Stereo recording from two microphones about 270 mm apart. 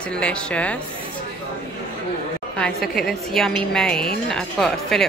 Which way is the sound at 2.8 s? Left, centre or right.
Centre.